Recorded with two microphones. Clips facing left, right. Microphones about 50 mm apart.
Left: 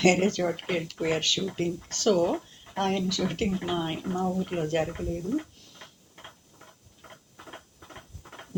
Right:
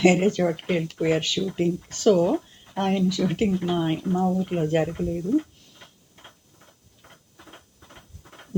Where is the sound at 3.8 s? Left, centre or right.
Centre.